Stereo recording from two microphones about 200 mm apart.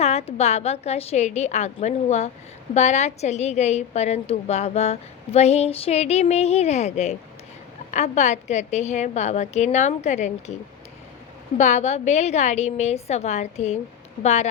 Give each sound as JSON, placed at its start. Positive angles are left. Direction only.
{"t": 0.0, "sound": "a woman's voice", "side_deg": 30}
{"t": 11.5, "sound": "a woman's voice", "side_deg": 35}